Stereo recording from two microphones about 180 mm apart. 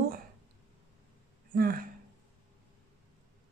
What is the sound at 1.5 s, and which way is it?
Speech, 55° right (ahead or behind).